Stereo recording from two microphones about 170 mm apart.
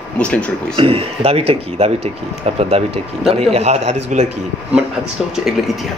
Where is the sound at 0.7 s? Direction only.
35° right (ahead or behind).